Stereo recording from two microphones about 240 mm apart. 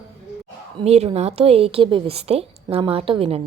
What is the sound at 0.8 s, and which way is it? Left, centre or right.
A woman's voice, right.